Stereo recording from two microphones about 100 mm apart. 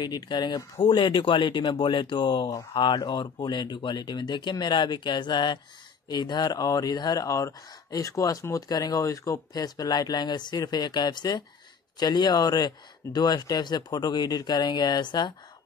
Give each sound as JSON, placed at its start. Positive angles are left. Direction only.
{"t": 0.0, "sound": "speech", "side_deg": 45}